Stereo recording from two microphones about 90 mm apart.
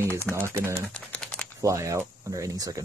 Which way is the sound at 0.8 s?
10° left (ahead or behind).